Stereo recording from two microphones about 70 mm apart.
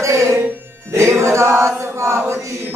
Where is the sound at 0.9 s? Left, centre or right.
Right.